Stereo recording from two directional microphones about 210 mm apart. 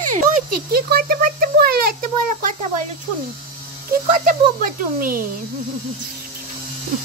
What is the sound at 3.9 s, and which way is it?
Speech, 40° right (ahead or behind).